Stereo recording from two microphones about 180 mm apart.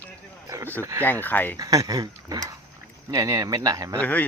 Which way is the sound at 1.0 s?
10° left (ahead or behind).